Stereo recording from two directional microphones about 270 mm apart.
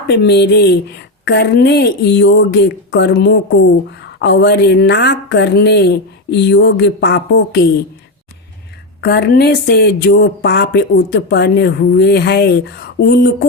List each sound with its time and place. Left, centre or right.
0.1 s a woman's voice: left
9.0 s a woman's voice: left